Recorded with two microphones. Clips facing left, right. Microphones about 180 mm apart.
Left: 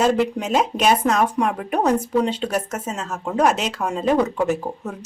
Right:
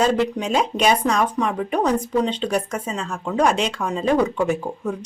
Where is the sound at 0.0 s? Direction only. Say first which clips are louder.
Left 1 dB; 5° left (ahead or behind).